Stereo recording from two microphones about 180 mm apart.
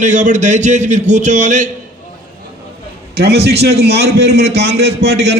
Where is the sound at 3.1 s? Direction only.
65° right (ahead or behind).